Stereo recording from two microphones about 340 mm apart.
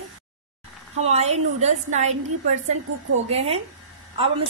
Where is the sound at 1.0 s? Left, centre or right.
Centre.